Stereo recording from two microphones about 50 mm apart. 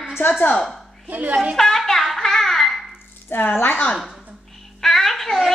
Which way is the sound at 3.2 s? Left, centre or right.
Left.